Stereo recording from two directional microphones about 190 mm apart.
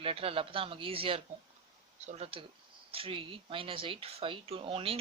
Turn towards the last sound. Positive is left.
turn(degrees=-30)  # may be behind; listen again after turning